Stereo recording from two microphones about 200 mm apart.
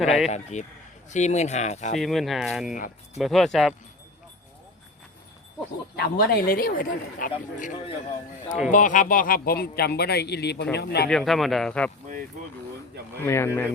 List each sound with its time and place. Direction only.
0.0 s speech: centre (ahead or behind)
0.3 s speech: 35° left (ahead or behind)
2.0 s speech: centre (ahead or behind)
6.0 s a man's voice: 50° left (ahead or behind)
11.1 s speech: centre (ahead or behind)
13.2 s speech: 15° left (ahead or behind)